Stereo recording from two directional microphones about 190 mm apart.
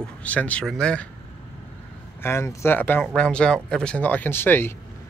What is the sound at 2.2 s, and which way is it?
Speech, 15° left (ahead or behind).